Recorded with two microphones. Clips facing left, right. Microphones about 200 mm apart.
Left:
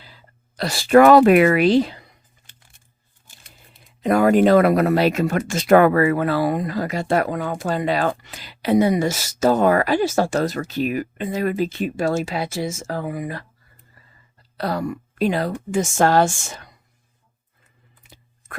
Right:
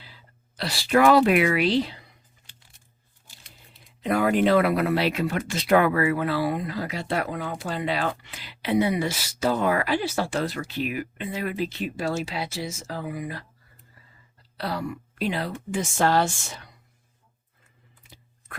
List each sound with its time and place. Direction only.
0.0 s speech: 45° left (ahead or behind)
4.0 s speech: 45° left (ahead or behind)
14.5 s speech: 45° left (ahead or behind)
18.4 s plop: 45° left (ahead or behind)